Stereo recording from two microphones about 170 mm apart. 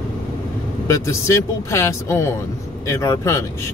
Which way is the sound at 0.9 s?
15° left (ahead or behind).